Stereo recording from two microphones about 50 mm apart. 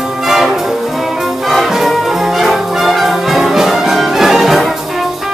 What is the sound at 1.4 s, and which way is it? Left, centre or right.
Brass instrument, centre.